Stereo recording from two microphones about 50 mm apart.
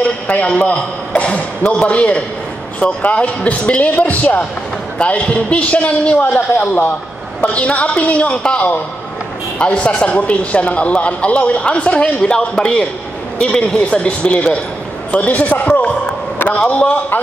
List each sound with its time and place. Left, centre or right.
0.0 s a man's voice: left